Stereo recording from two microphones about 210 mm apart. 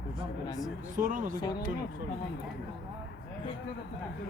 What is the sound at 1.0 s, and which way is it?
Speech, 40° right (ahead or behind).